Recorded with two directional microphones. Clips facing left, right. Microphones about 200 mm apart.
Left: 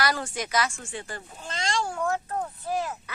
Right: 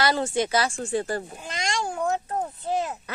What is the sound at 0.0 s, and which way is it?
Speech, 25° right (ahead or behind).